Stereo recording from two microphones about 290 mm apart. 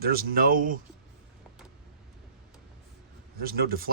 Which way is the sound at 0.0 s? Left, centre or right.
Right.